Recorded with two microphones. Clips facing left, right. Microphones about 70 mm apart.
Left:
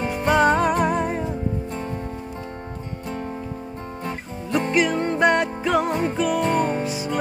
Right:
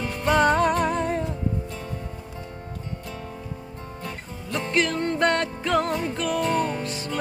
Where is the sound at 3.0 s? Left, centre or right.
Left.